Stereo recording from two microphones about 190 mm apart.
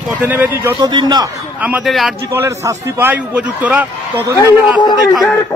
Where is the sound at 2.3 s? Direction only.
15° right (ahead or behind).